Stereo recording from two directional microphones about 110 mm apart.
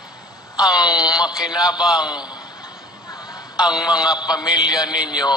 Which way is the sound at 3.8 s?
40° left (ahead or behind).